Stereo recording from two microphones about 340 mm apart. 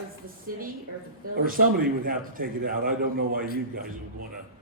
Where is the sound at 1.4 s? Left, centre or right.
Right.